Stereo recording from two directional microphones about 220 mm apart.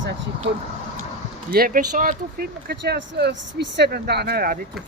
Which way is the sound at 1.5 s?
40° right (ahead or behind).